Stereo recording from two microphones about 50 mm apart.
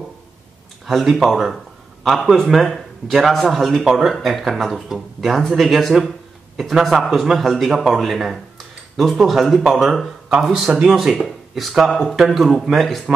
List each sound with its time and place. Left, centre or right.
0.8 s a man's voice: centre